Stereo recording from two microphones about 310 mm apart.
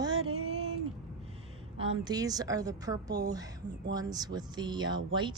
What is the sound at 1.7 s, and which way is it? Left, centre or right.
Speech, centre.